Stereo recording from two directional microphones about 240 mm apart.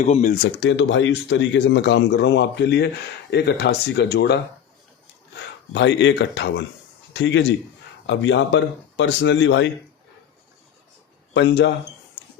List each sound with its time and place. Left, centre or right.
0.0 s speech: left
0.4 s speech: left
5.7 s a man's voice: left
11.3 s speech: left